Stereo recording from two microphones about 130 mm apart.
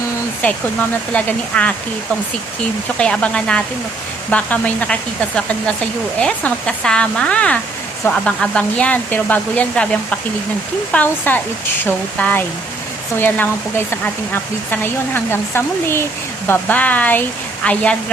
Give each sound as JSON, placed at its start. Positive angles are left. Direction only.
{"t": 0.4, "sound": "speech", "side_deg": 10}
{"t": 3.0, "sound": "speech", "side_deg": 10}